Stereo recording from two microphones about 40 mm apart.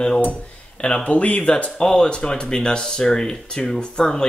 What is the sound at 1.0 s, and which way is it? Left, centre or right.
Speech, left.